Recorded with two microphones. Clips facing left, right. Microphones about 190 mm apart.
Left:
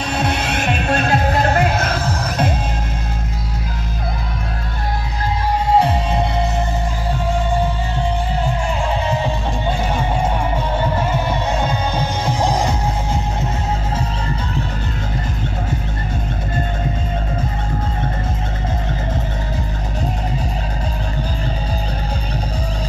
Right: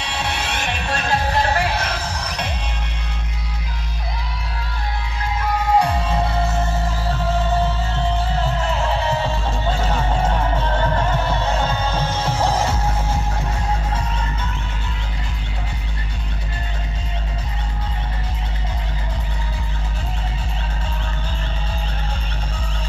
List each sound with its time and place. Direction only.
0.1 s music: 50° left (ahead or behind)
5.8 s music: 25° left (ahead or behind)
9.1 s music: 15° left (ahead or behind)